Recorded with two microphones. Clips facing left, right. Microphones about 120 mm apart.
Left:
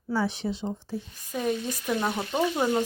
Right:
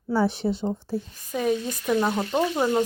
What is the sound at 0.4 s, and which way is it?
Speech, 20° right (ahead or behind).